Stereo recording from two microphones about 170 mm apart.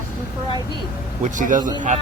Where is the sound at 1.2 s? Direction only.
50° right (ahead or behind).